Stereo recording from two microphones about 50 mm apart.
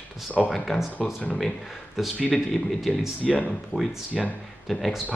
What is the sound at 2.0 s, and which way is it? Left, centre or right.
Speech, centre.